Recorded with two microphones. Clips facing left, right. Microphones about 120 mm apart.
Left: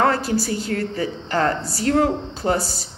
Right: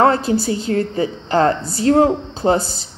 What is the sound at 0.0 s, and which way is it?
A woman's voice, 25° right (ahead or behind).